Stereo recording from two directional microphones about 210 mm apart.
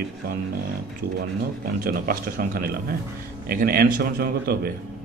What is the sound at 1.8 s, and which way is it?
A man's voice, 45° right (ahead or behind).